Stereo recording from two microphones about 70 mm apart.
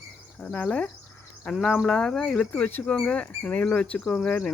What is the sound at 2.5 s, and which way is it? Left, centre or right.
Speech, left.